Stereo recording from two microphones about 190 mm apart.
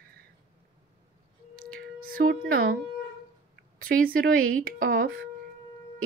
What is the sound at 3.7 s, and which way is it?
Speech, 50° right (ahead or behind).